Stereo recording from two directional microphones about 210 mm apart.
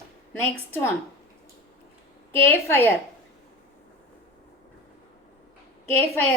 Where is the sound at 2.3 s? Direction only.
10° left (ahead or behind).